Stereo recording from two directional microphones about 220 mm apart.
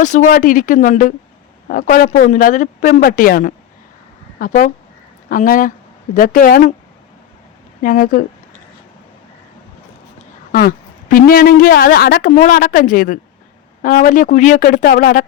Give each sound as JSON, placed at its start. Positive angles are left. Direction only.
{"t": 0.0, "sound": "a man's voice", "side_deg": 35}
{"t": 7.8, "sound": "a man's voice", "side_deg": 40}
{"t": 10.5, "sound": "a man's voice", "side_deg": 40}